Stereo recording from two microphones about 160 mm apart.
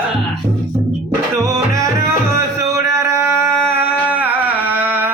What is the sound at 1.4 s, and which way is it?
Music, 20° right (ahead or behind).